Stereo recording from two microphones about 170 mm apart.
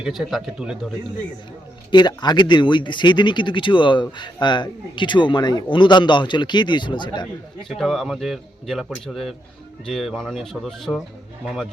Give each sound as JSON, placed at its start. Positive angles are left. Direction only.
{"t": 0.0, "sound": "a man's voice", "side_deg": 0}
{"t": 1.9, "sound": "speech", "side_deg": 25}
{"t": 7.7, "sound": "a man's voice", "side_deg": 0}